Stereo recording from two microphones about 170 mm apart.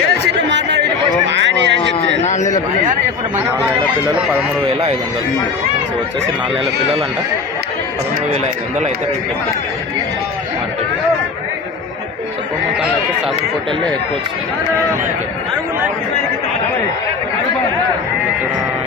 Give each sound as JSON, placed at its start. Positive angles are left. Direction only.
{"t": 0.1, "sound": "chatter", "side_deg": -90}
{"t": 1.3, "sound": "a sound", "side_deg": -90}
{"t": 2.2, "sound": "a man's voice", "side_deg": 45}